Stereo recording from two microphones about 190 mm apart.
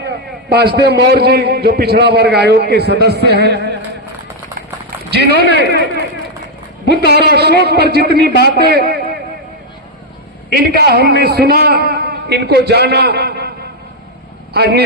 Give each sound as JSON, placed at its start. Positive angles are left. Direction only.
{"t": 0.5, "sound": "a man's voice", "side_deg": -60}
{"t": 5.1, "sound": "a man's voice", "side_deg": -60}
{"t": 7.1, "sound": "a man's voice", "side_deg": -60}
{"t": 10.5, "sound": "a man's voice", "side_deg": -55}
{"t": 14.5, "sound": "a man's voice", "side_deg": -55}